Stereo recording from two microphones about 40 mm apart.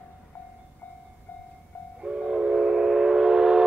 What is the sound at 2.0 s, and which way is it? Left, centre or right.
Train, centre.